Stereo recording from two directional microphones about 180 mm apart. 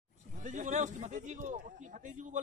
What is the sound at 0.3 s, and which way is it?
A man's voice, 45° right (ahead or behind).